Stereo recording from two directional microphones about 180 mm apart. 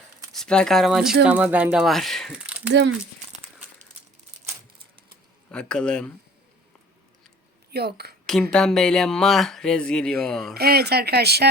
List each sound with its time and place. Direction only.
0.3 s speech: 5° left (ahead or behind)
5.5 s speech: 5° left (ahead or behind)
7.7 s speech: 65° right (ahead or behind)
8.3 s speech: 5° left (ahead or behind)
10.5 s speech: 60° right (ahead or behind)